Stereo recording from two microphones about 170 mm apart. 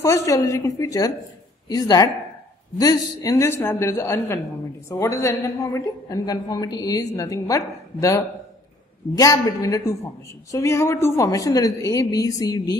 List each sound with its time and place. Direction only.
0.0 s a man's voice: 15° left (ahead or behind)